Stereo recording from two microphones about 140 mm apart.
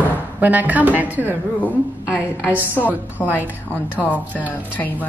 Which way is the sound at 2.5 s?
15° left (ahead or behind).